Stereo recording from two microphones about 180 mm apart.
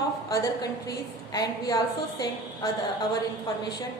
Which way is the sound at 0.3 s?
20° left (ahead or behind).